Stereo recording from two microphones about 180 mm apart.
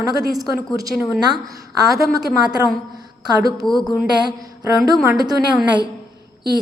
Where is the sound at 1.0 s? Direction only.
5° right (ahead or behind).